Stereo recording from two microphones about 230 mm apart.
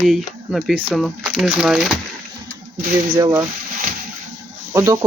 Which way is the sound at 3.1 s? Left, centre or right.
Centre.